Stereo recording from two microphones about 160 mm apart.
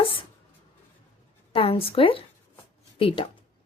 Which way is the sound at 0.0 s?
35° left (ahead or behind).